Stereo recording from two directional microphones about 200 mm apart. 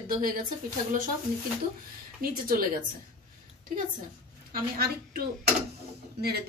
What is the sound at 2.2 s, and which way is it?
Speech, 45° right (ahead or behind).